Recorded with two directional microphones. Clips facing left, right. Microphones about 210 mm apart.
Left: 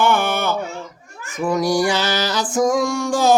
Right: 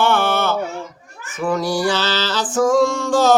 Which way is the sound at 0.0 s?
15° left (ahead or behind).